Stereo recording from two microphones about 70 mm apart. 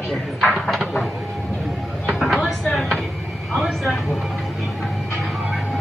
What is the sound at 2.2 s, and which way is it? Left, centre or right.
Vehicle, centre.